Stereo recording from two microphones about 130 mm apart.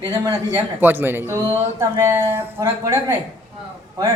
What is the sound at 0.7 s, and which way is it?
Speech, 15° right (ahead or behind).